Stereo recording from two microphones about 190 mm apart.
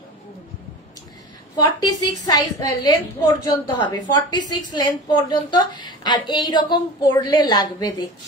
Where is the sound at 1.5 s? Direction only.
20° left (ahead or behind).